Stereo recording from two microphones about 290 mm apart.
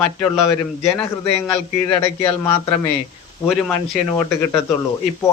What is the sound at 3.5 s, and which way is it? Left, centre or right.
Speech, centre.